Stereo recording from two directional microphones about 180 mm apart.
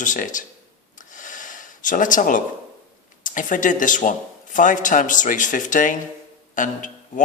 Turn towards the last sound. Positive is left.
turn(degrees=45)  # may be behind; listen again after turning